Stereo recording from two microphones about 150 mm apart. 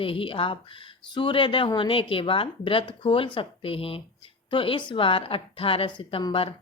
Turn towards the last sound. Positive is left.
turn(degrees=35)  # may be behind; listen again after turning